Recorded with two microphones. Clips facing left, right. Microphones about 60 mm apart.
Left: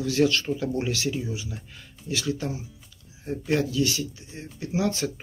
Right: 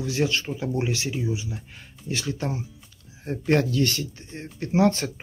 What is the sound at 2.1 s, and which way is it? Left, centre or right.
Speech, right.